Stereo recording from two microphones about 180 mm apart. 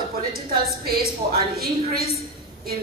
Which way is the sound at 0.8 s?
55° right (ahead or behind).